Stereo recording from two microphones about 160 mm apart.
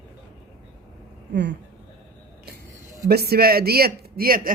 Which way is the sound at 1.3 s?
90° right.